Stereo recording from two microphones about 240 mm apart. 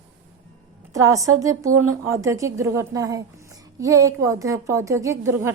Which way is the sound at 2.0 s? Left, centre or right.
Centre.